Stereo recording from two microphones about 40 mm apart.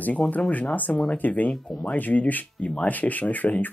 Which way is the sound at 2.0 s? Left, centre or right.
Left.